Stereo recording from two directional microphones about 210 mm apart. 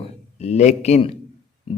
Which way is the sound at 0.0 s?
30° left (ahead or behind).